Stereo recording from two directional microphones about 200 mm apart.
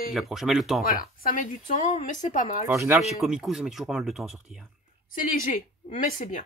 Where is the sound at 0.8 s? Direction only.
45° left (ahead or behind).